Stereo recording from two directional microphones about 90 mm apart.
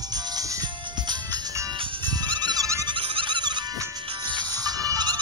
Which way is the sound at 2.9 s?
80° right.